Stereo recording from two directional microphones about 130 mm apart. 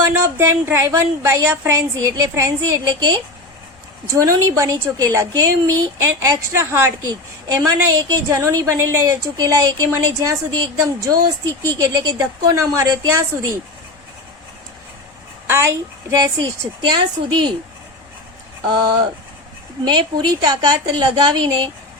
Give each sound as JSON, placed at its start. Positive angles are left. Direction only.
{"t": 0.0, "sound": "a woman's voice", "side_deg": -20}
{"t": 15.4, "sound": "a woman's voice", "side_deg": -20}
{"t": 16.9, "sound": "a woman's voice", "side_deg": -35}
{"t": 18.7, "sound": "a woman's voice", "side_deg": -35}